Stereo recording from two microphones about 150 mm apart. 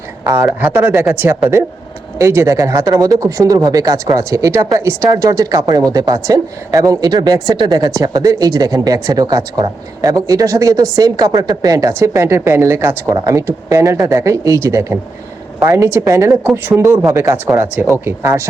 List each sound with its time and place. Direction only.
0.3 s speech: 20° right (ahead or behind)